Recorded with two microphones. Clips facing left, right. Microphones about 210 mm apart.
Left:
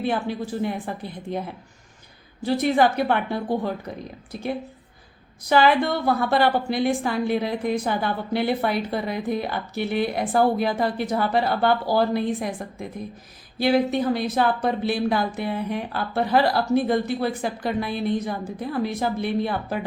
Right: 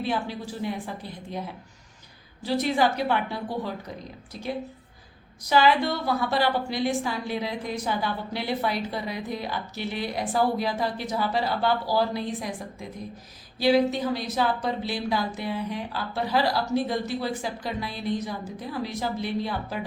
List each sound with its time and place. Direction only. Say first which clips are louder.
0.0 s a woman's voice: left 4 dB; 55° left (ahead or behind)
5.5 s a woman's voice: left 3 dB; 55° left (ahead or behind)